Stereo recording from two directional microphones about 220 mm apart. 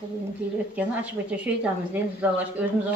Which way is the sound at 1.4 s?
10° right (ahead or behind).